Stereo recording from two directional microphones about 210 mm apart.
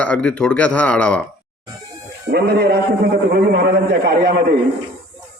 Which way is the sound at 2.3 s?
50° right (ahead or behind).